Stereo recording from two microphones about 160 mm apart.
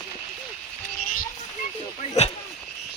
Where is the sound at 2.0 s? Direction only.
40° left (ahead or behind).